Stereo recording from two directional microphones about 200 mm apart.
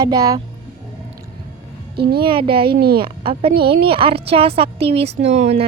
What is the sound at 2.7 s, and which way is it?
Speech, 50° right (ahead or behind).